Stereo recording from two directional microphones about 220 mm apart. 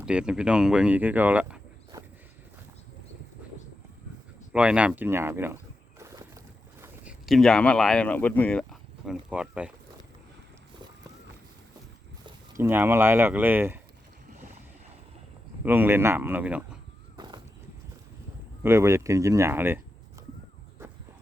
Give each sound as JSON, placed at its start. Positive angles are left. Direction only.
{"t": 0.0, "sound": "speech", "side_deg": -5}
{"t": 4.5, "sound": "speech", "side_deg": -5}
{"t": 6.0, "sound": "boat", "side_deg": -15}
{"t": 6.8, "sound": "speech", "side_deg": -5}
{"t": 12.2, "sound": "speech", "side_deg": -10}
{"t": 15.6, "sound": "speech", "side_deg": -10}
{"t": 17.2, "sound": "a sound", "side_deg": -20}
{"t": 18.6, "sound": "speech", "side_deg": -10}